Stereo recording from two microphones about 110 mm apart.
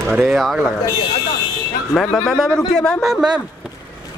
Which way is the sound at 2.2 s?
Centre (ahead or behind).